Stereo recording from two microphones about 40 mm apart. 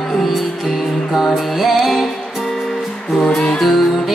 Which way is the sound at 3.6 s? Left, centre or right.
Centre.